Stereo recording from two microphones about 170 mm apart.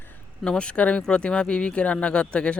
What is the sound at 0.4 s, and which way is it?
Speech, 5° left (ahead or behind).